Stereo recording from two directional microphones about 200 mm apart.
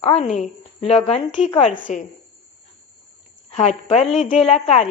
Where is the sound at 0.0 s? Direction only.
30° left (ahead or behind).